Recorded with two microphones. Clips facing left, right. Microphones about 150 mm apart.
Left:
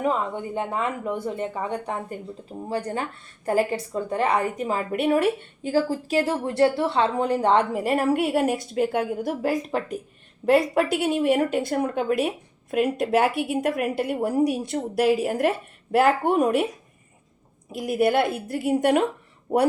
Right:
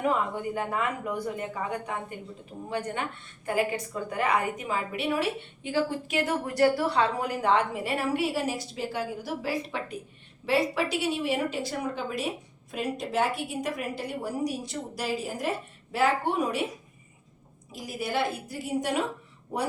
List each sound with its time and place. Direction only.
0.5 s a woman's voice: 25° left (ahead or behind)
4.9 s a woman's voice: 50° left (ahead or behind)
17.7 s a woman's voice: 60° left (ahead or behind)